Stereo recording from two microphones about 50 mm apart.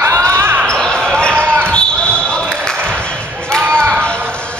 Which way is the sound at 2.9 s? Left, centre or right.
Centre.